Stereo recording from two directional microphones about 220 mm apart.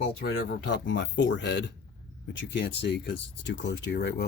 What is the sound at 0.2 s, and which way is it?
Speech, 50° left (ahead or behind).